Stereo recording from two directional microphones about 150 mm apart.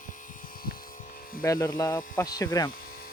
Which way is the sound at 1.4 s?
20° left (ahead or behind).